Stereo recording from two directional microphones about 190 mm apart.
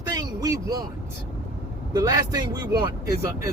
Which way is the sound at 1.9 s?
20° right (ahead or behind).